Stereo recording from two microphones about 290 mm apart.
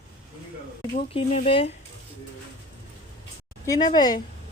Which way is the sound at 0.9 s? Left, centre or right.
Left.